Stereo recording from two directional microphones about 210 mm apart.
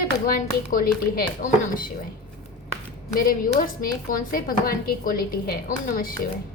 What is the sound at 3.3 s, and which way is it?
A woman's voice, 40° left (ahead or behind).